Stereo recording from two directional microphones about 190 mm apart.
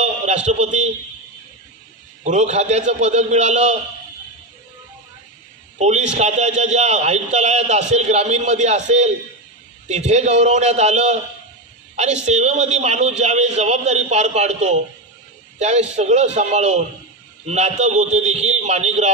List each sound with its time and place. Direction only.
0.5 s a man's voice: 40° right (ahead or behind)
2.2 s a man's voice: 35° right (ahead or behind)
5.8 s a man's voice: 35° right (ahead or behind)